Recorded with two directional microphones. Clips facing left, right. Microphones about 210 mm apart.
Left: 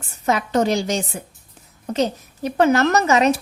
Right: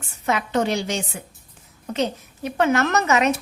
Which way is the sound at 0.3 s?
40° left (ahead or behind).